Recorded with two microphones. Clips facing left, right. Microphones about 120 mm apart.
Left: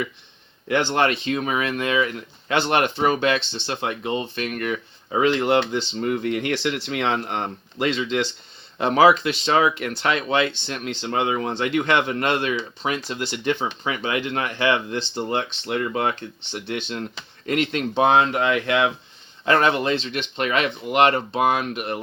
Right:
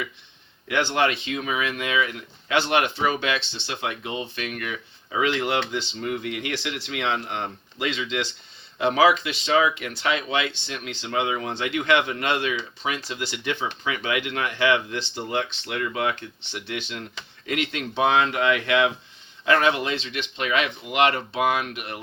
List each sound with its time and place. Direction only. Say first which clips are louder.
0.9 s speech: left 3 dB; 40° left (ahead or behind)
5.3 s speech: left 5 dB; 30° left (ahead or behind)
5.9 s speech: left 5 dB; 40° left (ahead or behind)
9.4 s speech: left 2 dB; 55° left (ahead or behind); by 22.0 s 35° left (ahead or behind)